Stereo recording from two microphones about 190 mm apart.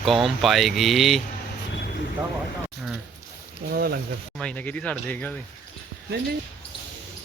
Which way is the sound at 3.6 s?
55° right (ahead or behind).